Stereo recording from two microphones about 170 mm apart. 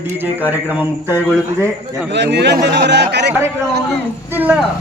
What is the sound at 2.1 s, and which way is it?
Speech, 85° right.